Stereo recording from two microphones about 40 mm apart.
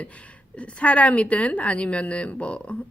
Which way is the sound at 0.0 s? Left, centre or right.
Left.